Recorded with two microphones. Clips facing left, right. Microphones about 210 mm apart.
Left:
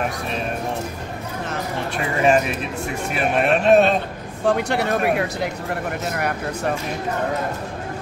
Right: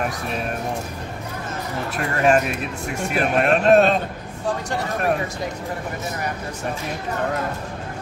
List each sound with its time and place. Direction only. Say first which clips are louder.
2.0 s speech: even; centre (ahead or behind)
4.5 s speech: left 6 dB; 70° left (ahead or behind)